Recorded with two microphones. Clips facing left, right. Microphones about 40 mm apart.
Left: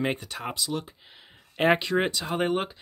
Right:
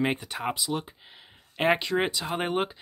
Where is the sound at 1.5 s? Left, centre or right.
Centre.